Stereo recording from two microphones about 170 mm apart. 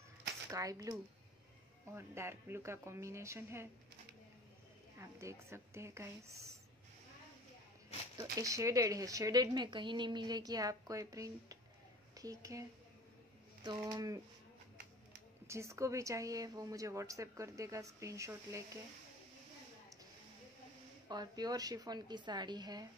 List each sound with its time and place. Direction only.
0.5 s a woman's voice: 20° right (ahead or behind)
4.9 s speech: 15° right (ahead or behind)
8.2 s a woman's voice: 20° right (ahead or behind)
13.7 s a woman's voice: 25° right (ahead or behind)
15.4 s a woman's voice: 15° right (ahead or behind)
21.1 s a woman's voice: 25° right (ahead or behind)